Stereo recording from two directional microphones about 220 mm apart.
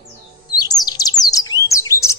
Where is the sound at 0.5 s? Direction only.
15° left (ahead or behind).